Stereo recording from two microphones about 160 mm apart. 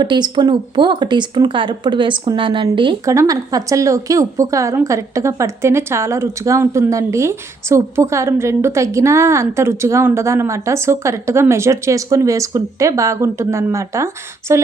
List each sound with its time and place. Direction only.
0.0 s speech: 30° right (ahead or behind)
3.0 s a woman's voice: 20° right (ahead or behind)